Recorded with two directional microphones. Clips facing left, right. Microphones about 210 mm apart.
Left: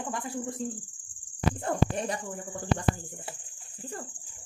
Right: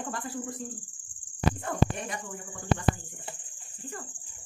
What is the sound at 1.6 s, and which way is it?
Speech, 35° left (ahead or behind).